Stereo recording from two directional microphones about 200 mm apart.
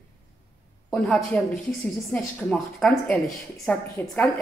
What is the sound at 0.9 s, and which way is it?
A woman's voice, 5° left (ahead or behind).